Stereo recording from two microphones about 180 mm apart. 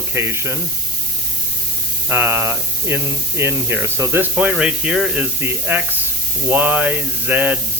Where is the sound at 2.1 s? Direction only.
10° right (ahead or behind).